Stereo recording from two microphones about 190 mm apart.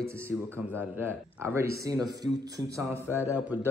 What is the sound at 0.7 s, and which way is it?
A man's voice, 10° right (ahead or behind).